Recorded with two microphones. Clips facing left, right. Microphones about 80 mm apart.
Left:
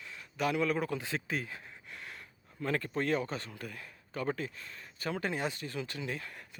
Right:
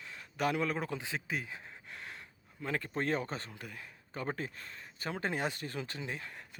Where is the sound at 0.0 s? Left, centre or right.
Right; by 1.7 s centre.